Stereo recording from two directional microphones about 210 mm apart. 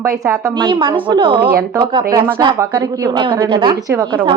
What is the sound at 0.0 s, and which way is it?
Speech, 15° right (ahead or behind).